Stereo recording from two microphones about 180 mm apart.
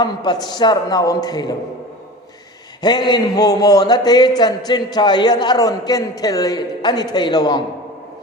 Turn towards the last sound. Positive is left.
turn(degrees=20)  # may be behind; listen again after turning